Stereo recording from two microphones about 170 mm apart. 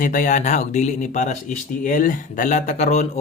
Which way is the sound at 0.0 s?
50° left (ahead or behind).